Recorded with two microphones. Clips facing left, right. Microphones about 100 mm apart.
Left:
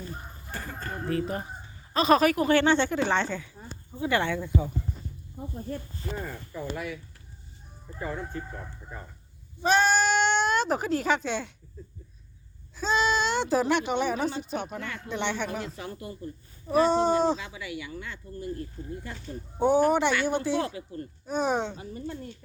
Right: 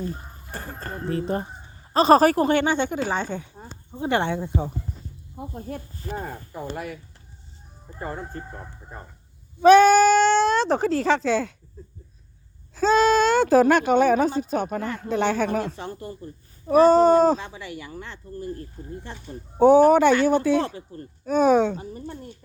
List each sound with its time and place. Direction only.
0.5 s speech: 35° right (ahead or behind)
2.6 s speech: 15° right (ahead or behind)
5.4 s speech: 60° right (ahead or behind)
6.2 s speech: 45° right (ahead or behind)
8.4 s speech: 25° right (ahead or behind)
9.6 s speech: 55° right (ahead or behind)
12.7 s speech: 45° right (ahead or behind)
19.1 s speech: 20° right (ahead or behind)
19.5 s speech: 50° right (ahead or behind)
21.2 s speech: 50° right (ahead or behind)
21.8 s speech: 30° right (ahead or behind)